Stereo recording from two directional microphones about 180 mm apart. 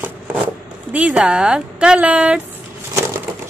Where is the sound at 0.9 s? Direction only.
5° right (ahead or behind).